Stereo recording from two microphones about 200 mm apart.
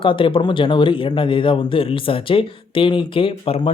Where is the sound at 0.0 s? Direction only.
25° left (ahead or behind).